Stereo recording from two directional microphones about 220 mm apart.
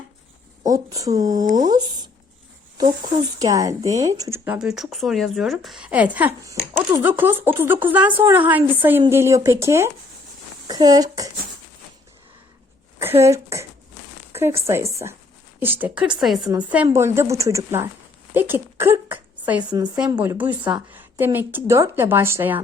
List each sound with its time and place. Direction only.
0.6 s speech: 15° right (ahead or behind)
1.5 s speech: 35° right (ahead or behind)
3.3 s speech: 15° right (ahead or behind)
13.0 s speech: 10° right (ahead or behind)
14.7 s speech: 15° right (ahead or behind)
16.5 s a woman's voice: 20° right (ahead or behind)